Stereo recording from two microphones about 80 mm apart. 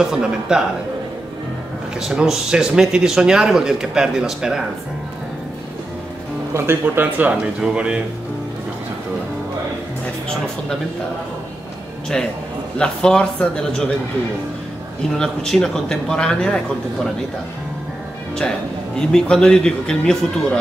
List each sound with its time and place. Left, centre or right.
0.0 s a man's voice: centre
2.0 s a man's voice: centre
6.5 s speech: right; by 8.0 s centre
12.7 s a man's voice: centre
15.1 s a man's voice: centre
18.9 s a man's voice: centre